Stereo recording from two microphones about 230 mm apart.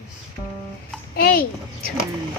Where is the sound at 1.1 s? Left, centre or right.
Left.